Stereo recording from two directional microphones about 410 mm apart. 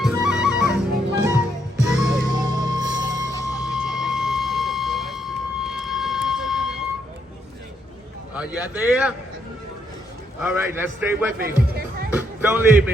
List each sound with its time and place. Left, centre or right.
0.0 s music: centre
1.8 s music: centre
3.3 s a sound: centre
8.4 s a man's voice: centre
10.4 s a man's voice: centre
11.3 s speech: right
12.1 s speech: centre